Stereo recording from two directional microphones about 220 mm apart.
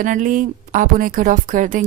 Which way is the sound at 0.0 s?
35° right (ahead or behind).